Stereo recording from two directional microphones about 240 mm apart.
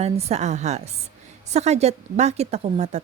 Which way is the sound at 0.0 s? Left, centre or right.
Right.